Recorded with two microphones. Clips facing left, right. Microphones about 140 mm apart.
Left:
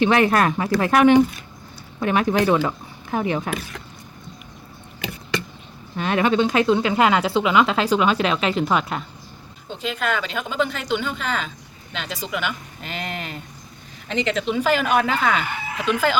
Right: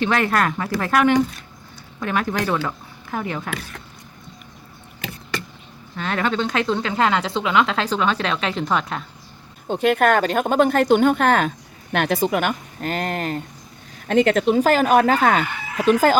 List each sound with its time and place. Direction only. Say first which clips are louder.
0.0 s a woman's voice: left 3 dB; 20° left (ahead or behind)
6.0 s speech: left 4 dB; 15° left (ahead or behind)
9.6 s speech: right 9 dB; 55° right (ahead or behind); by 16.1 s 40° right (ahead or behind)